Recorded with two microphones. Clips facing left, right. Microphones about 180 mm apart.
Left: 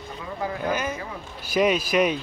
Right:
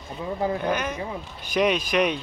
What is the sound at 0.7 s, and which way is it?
A man's voice, 5° left (ahead or behind).